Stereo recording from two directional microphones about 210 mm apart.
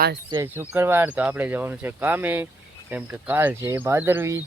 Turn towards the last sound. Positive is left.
turn(degrees=-10)  # may be behind; listen again after turning